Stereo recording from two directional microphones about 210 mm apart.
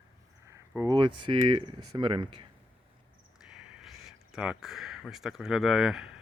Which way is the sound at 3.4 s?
5° right (ahead or behind).